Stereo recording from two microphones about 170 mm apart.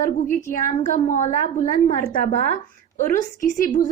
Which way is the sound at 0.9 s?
40° left (ahead or behind).